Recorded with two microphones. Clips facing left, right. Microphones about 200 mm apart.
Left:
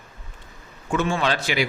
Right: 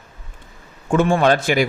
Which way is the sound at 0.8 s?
55° right (ahead or behind).